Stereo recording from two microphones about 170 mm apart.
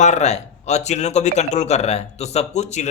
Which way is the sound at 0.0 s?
40° left (ahead or behind).